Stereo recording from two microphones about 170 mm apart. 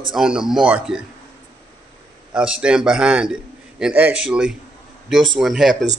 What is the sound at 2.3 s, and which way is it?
A man's voice, 5° right (ahead or behind).